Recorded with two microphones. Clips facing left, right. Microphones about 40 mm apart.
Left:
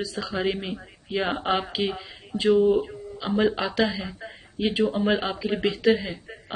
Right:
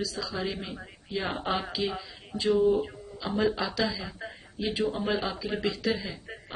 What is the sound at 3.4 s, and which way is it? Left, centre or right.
Speech, left.